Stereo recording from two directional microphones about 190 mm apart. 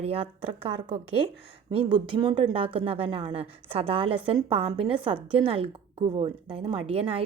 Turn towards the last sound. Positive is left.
turn(degrees=-30)  # may be behind; listen again after turning